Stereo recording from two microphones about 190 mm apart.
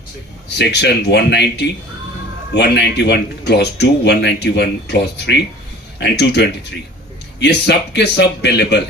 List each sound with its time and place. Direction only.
0.6 s speech: 60° left (ahead or behind)